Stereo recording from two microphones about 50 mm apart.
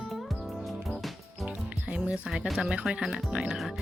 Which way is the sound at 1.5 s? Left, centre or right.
Right.